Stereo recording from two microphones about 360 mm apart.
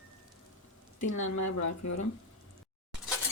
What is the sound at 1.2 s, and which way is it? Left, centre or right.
Speech, left.